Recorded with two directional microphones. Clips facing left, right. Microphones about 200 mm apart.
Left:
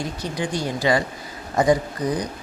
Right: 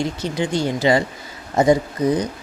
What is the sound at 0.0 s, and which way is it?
Speech, 25° right (ahead or behind).